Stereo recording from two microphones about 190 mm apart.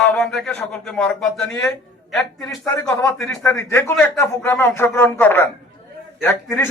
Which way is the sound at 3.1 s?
5° left (ahead or behind).